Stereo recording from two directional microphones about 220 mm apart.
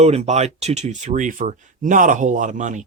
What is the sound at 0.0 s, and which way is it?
Speech, 30° right (ahead or behind).